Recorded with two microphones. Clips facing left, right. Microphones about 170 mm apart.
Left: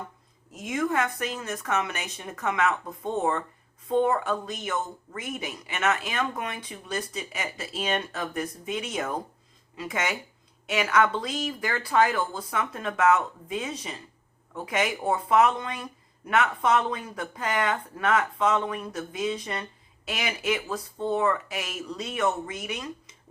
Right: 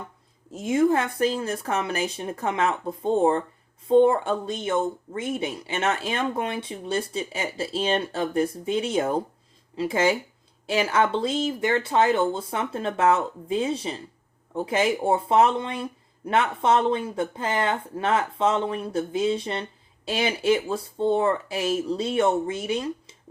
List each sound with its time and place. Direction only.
0.5 s speech: 30° right (ahead or behind)